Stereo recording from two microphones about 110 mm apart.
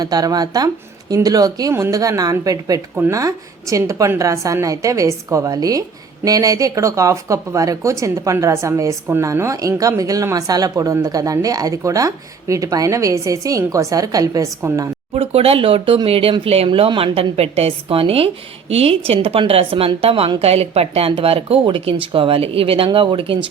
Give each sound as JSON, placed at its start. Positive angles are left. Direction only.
{"t": 0.0, "sound": "speech", "side_deg": -35}
{"t": 15.1, "sound": "speech", "side_deg": -65}